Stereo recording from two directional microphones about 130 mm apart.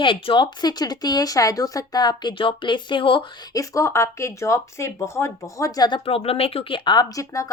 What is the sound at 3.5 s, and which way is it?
Speech, 25° left (ahead or behind).